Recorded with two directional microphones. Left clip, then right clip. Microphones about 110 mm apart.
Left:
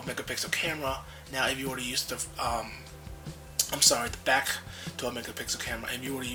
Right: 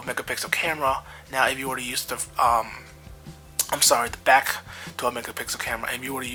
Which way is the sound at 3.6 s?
30° right (ahead or behind).